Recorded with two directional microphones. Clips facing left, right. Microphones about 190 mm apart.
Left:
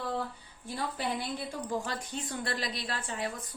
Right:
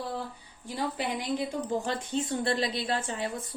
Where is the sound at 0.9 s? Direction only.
20° right (ahead or behind).